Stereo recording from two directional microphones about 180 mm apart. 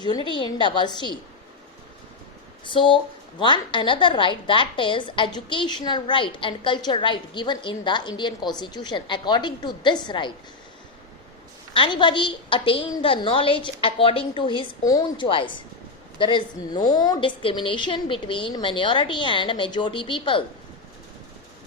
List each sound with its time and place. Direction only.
0.0 s a woman's voice: 25° left (ahead or behind)
2.6 s a woman's voice: 25° left (ahead or behind)
11.7 s a woman's voice: 30° left (ahead or behind)